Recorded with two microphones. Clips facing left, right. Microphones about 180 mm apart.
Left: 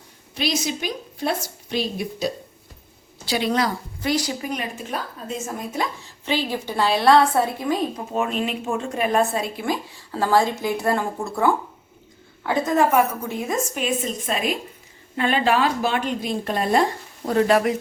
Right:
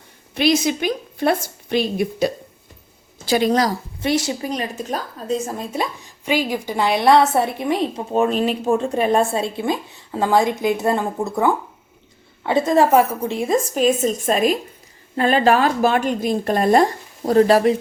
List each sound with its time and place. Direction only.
0.3 s a woman's voice: 55° right (ahead or behind)
3.2 s a woman's voice: 45° right (ahead or behind)
4.0 s a woman's voice: 25° right (ahead or behind)
6.2 s a woman's voice: 15° right (ahead or behind); by 17.7 s 30° right (ahead or behind)